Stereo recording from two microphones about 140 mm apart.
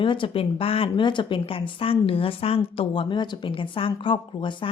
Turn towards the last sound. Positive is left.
turn(degrees=35)  # may be behind; listen again after turning